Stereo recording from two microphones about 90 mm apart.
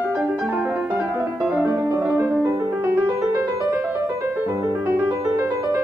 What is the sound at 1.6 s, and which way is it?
Music, 30° right (ahead or behind).